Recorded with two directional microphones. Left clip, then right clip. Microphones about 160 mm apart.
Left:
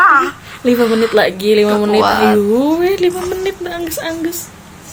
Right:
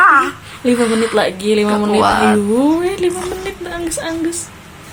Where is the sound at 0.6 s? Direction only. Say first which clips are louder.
Left 2 dB; 15° left (ahead or behind).